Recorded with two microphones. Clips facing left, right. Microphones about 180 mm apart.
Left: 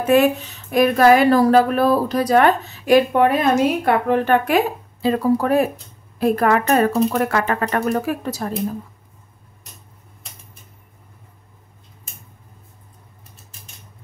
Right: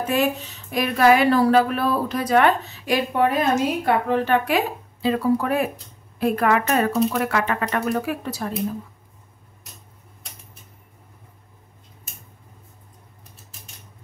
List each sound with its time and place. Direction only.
0.7 s speech: 50° left (ahead or behind)